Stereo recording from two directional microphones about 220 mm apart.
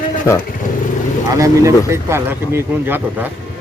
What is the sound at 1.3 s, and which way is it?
Speech, 15° right (ahead or behind).